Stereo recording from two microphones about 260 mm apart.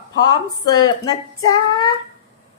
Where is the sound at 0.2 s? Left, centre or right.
Centre.